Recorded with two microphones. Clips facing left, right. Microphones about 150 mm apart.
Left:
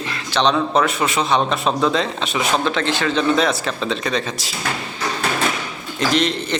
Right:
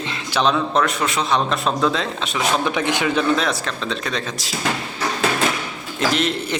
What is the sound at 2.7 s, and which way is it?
A man's voice, 15° right (ahead or behind).